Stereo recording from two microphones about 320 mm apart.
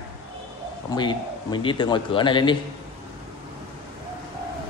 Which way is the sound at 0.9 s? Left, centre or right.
Centre.